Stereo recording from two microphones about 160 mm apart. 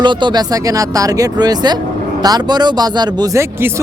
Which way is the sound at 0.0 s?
30° right (ahead or behind).